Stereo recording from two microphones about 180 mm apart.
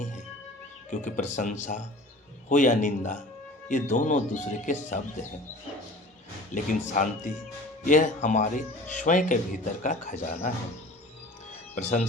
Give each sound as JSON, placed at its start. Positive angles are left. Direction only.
{"t": 0.9, "sound": "speech", "side_deg": 45}
{"t": 6.5, "sound": "speech", "side_deg": 45}
{"t": 11.7, "sound": "speech", "side_deg": 40}